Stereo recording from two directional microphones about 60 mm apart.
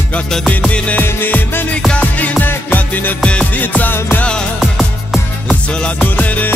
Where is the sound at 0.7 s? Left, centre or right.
Left.